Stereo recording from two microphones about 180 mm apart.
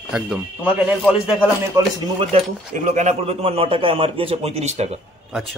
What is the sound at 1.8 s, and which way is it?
Speech, 15° right (ahead or behind).